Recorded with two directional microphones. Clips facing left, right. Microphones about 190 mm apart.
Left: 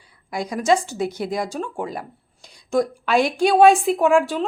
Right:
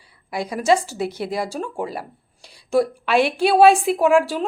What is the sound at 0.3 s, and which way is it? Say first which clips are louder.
A woman's voice: right 1 dB; 5° right (ahead or behind).